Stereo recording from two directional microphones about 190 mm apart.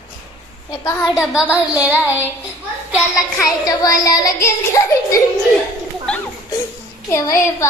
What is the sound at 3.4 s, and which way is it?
Child singing, 20° left (ahead or behind).